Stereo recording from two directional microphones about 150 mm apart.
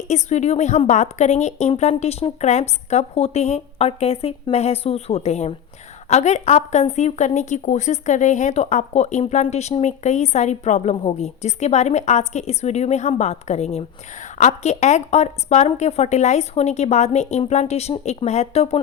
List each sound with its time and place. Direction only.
0.1 s a woman's voice: 50° left (ahead or behind)